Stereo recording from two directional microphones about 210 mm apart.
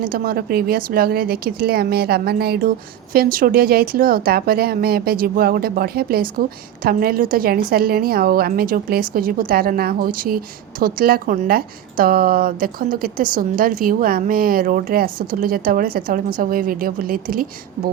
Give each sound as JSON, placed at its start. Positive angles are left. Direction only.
{"t": 0.0, "sound": "a woman's voice", "side_deg": -45}